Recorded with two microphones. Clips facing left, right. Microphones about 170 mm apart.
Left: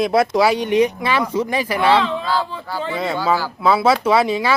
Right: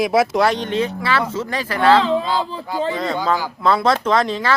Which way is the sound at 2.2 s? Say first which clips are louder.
Even; 20° right (ahead or behind).